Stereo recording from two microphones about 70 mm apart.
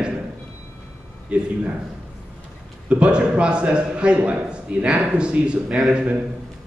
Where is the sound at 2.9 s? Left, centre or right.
Centre.